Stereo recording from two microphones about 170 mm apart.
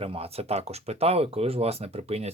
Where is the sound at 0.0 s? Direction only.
35° right (ahead or behind).